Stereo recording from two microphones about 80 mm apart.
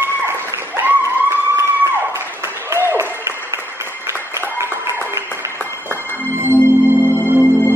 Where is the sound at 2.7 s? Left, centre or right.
Right.